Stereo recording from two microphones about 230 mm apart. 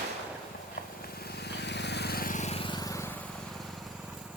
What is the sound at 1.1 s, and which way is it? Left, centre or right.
Vehicle, left.